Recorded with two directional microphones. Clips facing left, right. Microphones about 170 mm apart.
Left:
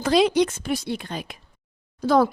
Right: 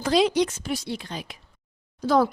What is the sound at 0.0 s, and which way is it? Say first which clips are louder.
Speech: left 2 dB; 60° left (ahead or behind).